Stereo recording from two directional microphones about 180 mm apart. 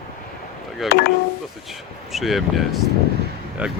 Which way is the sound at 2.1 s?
Centre (ahead or behind).